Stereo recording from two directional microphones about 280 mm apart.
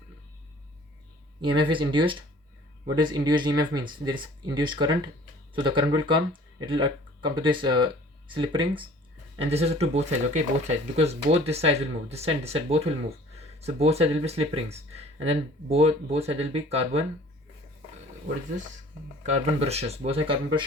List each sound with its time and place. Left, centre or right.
1.4 s speech: centre
19.2 s speech: right